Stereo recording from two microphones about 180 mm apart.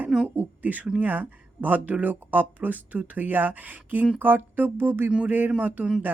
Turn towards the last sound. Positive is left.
turn(degrees=-5)  # may be behind; listen again after turning